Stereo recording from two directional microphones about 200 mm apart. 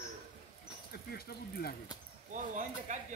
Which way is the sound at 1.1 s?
50° left (ahead or behind).